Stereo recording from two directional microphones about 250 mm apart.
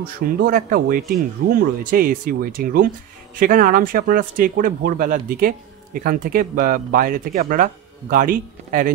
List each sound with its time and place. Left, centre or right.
0.0 s speech: right